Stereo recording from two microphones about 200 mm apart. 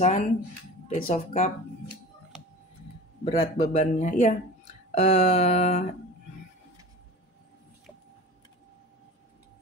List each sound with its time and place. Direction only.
0.0 s speech: 35° left (ahead or behind)
3.3 s speech: 30° left (ahead or behind)